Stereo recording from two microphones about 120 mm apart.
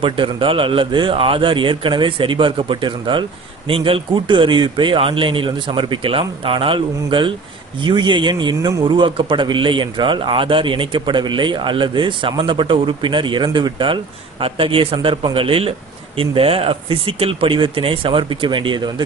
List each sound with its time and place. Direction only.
0.0 s a man's voice: 45° right (ahead or behind)